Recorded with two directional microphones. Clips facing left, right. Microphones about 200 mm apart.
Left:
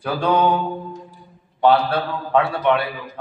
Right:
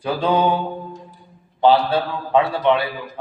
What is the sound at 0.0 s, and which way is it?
Speech, 25° right (ahead or behind).